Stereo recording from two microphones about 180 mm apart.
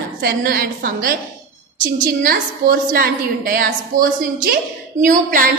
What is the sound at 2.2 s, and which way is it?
A woman's voice, 55° right (ahead or behind).